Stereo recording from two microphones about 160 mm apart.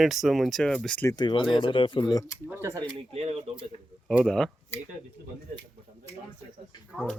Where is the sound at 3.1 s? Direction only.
40° right (ahead or behind).